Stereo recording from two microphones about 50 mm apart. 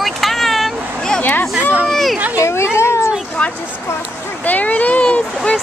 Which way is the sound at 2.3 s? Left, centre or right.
Left.